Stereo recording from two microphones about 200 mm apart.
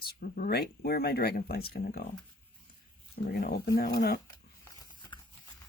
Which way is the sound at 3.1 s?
50° left (ahead or behind).